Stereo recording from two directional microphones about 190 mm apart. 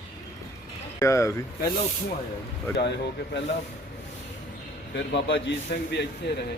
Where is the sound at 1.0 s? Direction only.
15° left (ahead or behind).